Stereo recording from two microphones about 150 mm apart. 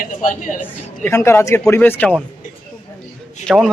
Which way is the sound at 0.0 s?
60° left (ahead or behind).